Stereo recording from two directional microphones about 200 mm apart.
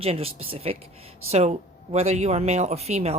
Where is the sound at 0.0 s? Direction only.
30° right (ahead or behind).